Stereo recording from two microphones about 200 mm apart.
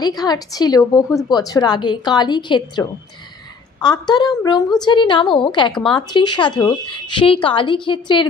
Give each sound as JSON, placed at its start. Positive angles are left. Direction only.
{"t": 0.0, "sound": "a woman's voice", "side_deg": 20}
{"t": 3.8, "sound": "a woman's voice", "side_deg": 20}